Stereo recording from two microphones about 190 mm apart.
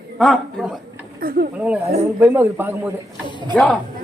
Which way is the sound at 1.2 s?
50° right (ahead or behind).